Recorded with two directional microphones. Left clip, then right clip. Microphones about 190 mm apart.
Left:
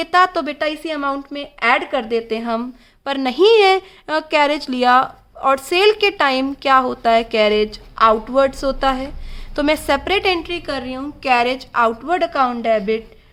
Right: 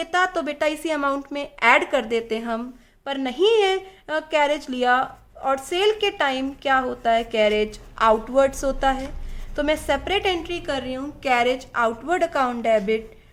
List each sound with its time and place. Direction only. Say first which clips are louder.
0.0 s a woman's voice: left 7 dB; 25° left (ahead or behind)
0.6 s a woman's voice: right 2 dB; 10° left (ahead or behind)
3.0 s a woman's voice: left 6 dB; 35° left (ahead or behind)
9.6 s a woman's voice: left 5 dB; 35° left (ahead or behind); by 13.0 s 15° left (ahead or behind)